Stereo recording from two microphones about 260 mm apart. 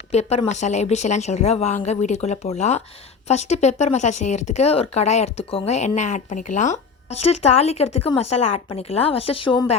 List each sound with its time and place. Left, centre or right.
0.1 s speech: left
7.9 s speech: left
8.2 s speech: left